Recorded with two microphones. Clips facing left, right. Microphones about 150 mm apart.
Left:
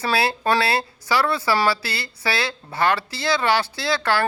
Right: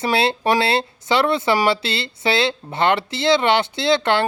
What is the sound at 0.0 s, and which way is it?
Speech, 25° right (ahead or behind).